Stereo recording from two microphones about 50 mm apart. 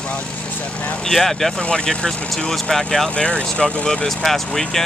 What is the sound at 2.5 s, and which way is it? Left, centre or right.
Speech, centre.